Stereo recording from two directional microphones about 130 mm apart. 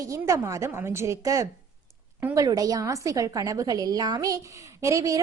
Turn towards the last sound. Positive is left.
turn(degrees=-25)  # may be behind; listen again after turning